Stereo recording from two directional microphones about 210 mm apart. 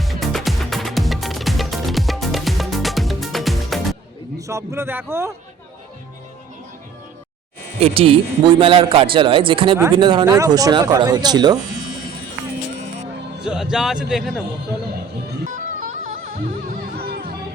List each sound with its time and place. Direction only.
0.0 s music: centre (ahead or behind)
4.4 s a man's voice: 15° right (ahead or behind)
7.8 s speech: 25° right (ahead or behind)
13.4 s speech: 5° right (ahead or behind)
15.4 s music: 40° right (ahead or behind)